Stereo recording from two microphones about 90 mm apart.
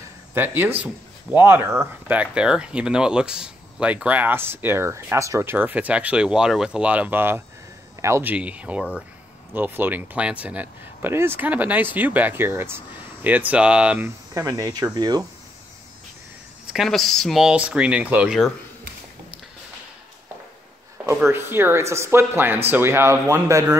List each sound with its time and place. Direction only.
0.3 s speech: 25° right (ahead or behind)
8.3 s speech: 15° right (ahead or behind)
13.9 s speech: 30° right (ahead or behind)
14.4 s speech: 40° right (ahead or behind)
16.7 s speech: centre (ahead or behind)
17.5 s speech: 15° right (ahead or behind)
21.3 s speech: 25° right (ahead or behind)